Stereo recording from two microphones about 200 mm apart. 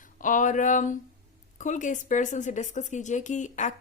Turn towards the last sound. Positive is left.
turn(degrees=40)  # may be behind; listen again after turning